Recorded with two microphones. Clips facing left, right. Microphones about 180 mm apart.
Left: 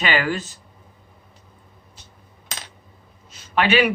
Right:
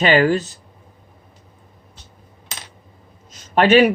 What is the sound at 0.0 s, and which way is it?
Speech, 40° right (ahead or behind).